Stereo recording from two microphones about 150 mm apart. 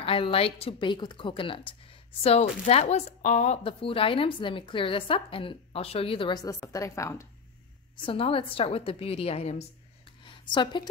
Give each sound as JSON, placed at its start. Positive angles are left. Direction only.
{"t": 0.0, "sound": "speech", "side_deg": 40}
{"t": 2.2, "sound": "a woman's voice", "side_deg": 45}
{"t": 8.0, "sound": "speech", "side_deg": 35}
{"t": 10.2, "sound": "speech", "side_deg": 30}